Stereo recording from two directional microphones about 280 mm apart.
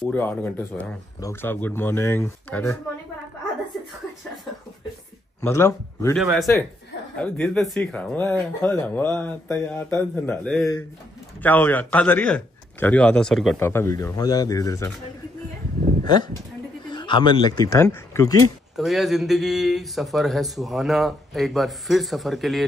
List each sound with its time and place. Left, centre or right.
0.0 s a man's voice: centre
5.4 s a man's voice: centre
16.0 s speech: centre
18.8 s a man's voice: centre